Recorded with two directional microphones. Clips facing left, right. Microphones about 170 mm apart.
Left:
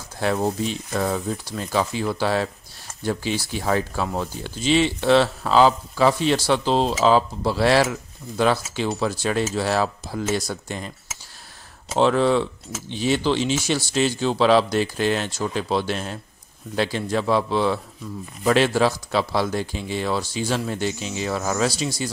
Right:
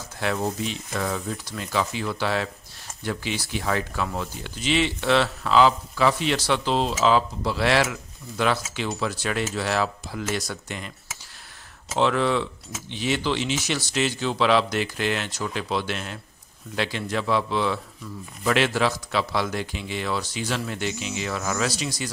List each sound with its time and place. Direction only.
0.2 s speech: 35° left (ahead or behind)
12.0 s speech: 35° left (ahead or behind)